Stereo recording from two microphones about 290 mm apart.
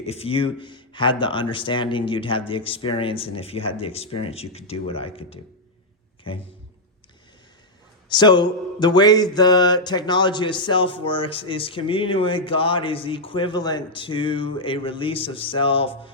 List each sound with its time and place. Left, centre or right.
0.0 s mantra: left
2.5 s speech: centre
6.3 s mantra: centre
8.1 s mantra: centre